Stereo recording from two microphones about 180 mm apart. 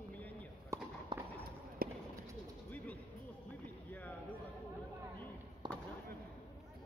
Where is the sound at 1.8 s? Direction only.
55° right (ahead or behind).